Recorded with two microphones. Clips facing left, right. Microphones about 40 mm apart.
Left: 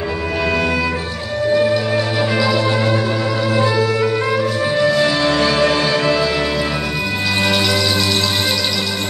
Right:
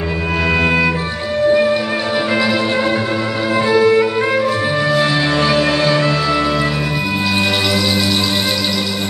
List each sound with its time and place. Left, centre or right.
0.6 s music: right
3.7 s music: right
4.7 s music: centre